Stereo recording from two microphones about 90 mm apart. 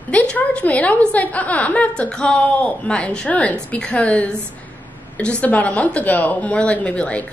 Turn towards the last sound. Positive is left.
turn(degrees=15)  # may be behind; listen again after turning